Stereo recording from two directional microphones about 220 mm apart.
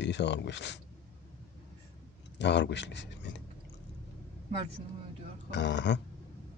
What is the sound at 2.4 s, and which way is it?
Speech, 50° left (ahead or behind).